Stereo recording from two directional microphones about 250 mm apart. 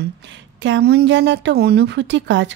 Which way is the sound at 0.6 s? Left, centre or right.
Right.